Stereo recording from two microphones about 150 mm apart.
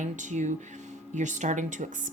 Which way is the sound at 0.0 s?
55° right (ahead or behind).